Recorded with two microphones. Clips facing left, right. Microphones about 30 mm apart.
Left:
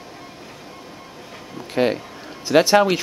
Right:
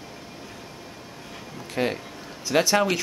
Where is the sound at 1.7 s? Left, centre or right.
Left.